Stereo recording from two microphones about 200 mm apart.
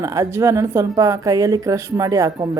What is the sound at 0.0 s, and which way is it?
A woman's voice, 15° right (ahead or behind).